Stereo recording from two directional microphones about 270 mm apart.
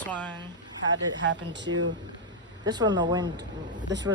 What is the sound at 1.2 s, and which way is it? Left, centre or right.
Speech, right.